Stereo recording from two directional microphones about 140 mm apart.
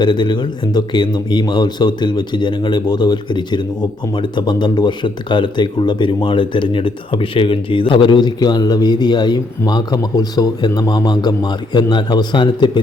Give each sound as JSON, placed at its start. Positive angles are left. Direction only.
{"t": 0.0, "sound": "speech", "side_deg": 35}